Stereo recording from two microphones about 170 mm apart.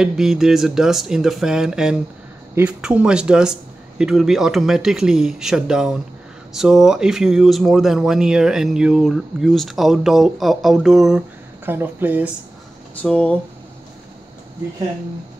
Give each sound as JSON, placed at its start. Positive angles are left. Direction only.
{"t": 0.0, "sound": "speech", "side_deg": -5}
{"t": 13.0, "sound": "speech", "side_deg": 5}